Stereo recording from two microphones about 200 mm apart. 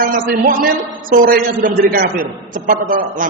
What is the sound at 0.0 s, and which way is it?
A man's voice, 45° right (ahead or behind).